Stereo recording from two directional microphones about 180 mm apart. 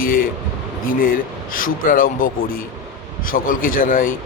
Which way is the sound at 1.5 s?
50° left (ahead or behind).